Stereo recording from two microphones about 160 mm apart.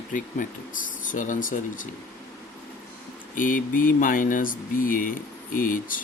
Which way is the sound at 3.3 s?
55° left (ahead or behind).